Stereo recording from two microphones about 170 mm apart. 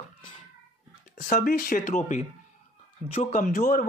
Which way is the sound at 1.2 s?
50° left (ahead or behind).